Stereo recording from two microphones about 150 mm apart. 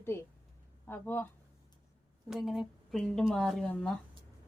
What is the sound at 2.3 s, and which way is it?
Speech, centre (ahead or behind).